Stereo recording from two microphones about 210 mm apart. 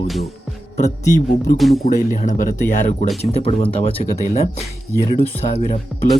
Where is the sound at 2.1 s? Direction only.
35° left (ahead or behind).